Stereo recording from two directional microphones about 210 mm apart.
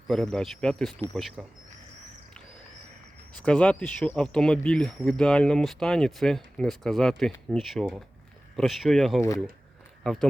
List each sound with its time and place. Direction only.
0.1 s speech: 5° left (ahead or behind)
3.3 s speech: 5° left (ahead or behind)